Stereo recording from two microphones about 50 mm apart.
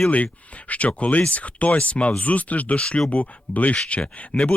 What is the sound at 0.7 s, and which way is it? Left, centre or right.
Speech, left.